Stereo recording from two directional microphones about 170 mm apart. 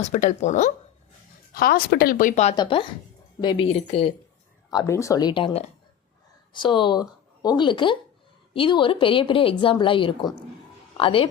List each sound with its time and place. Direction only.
0.0 s speech: 45° left (ahead or behind)
1.5 s speech: 60° left (ahead or behind); by 2.6 s 45° left (ahead or behind)
2.6 s a woman's voice: 30° left (ahead or behind)
4.7 s a woman's voice: 20° left (ahead or behind)